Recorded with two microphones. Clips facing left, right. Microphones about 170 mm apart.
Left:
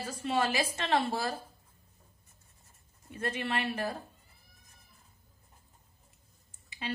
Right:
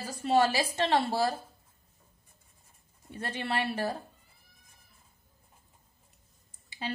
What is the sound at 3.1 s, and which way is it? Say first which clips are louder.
Speech: even; 35° right (ahead or behind).